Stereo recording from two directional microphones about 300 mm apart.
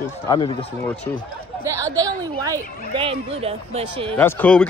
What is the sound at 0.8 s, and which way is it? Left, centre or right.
Speech, centre.